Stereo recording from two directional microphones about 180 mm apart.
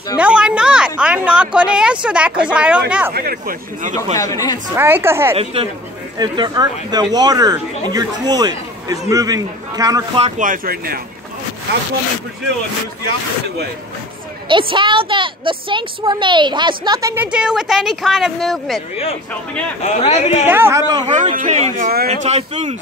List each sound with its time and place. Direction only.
0.2 s a woman's voice: 5° right (ahead or behind)
3.2 s speech: 55° right (ahead or behind)
4.2 s speech: 20° left (ahead or behind)
4.7 s speech: 15° right (ahead or behind)
5.3 s a man's voice: 35° right (ahead or behind)
10.2 s speech: 45° right (ahead or behind)
14.5 s speech: 30° right (ahead or behind)
17.1 s a woman's voice: 10° right (ahead or behind)
19.8 s a man's voice: 40° left (ahead or behind)
20.4 s speech: 10° right (ahead or behind)
21.1 s a man's voice: 40° right (ahead or behind)